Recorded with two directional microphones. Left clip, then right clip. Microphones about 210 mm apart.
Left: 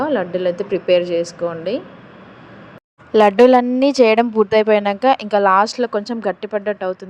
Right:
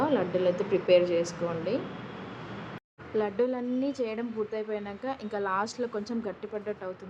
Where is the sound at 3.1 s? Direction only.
50° left (ahead or behind).